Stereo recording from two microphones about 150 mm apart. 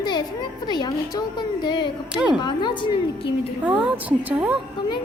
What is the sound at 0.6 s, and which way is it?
A woman's voice, 30° left (ahead or behind).